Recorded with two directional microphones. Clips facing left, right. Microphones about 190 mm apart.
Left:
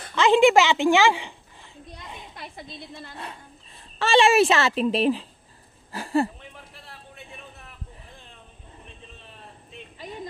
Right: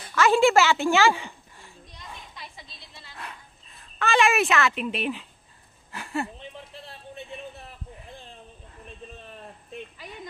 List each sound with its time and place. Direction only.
0.1 s a woman's voice: 20° left (ahead or behind)
2.3 s a woman's voice: 55° left (ahead or behind)
4.0 s a child's voice: 30° left (ahead or behind)
5.9 s a sound: 35° left (ahead or behind)